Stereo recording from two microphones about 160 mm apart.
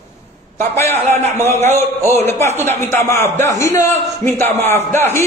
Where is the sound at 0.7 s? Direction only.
15° left (ahead or behind).